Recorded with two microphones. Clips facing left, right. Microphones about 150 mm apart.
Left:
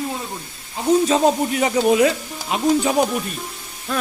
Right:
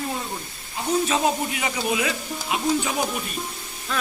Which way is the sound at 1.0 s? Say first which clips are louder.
Left 6 dB; 35° left (ahead or behind).